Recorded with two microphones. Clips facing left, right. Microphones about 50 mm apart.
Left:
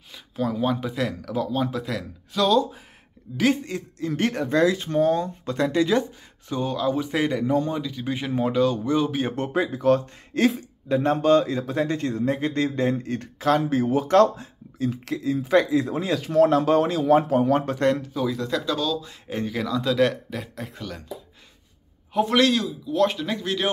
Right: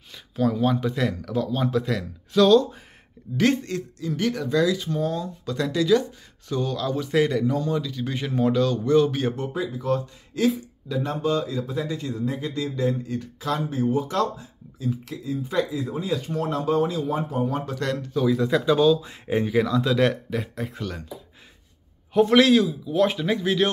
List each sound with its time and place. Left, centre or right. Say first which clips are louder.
0.1 s speech: right 3 dB; centre
4.1 s speech: left 1 dB; left
6.5 s speech: left 2 dB; centre
9.3 s speech: left 3 dB; left
17.7 s speech: left 6 dB; left
18.0 s speech: right 4 dB; centre
18.4 s speech: right 6 dB; centre
22.1 s speech: right 3 dB; centre